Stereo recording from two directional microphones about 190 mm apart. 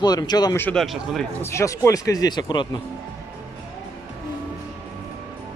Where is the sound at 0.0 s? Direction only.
20° left (ahead or behind).